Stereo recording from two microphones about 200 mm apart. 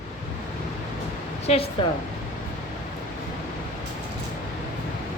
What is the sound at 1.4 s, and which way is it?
Speech, 30° left (ahead or behind).